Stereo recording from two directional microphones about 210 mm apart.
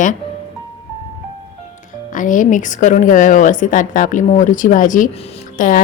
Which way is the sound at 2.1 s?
40° left (ahead or behind).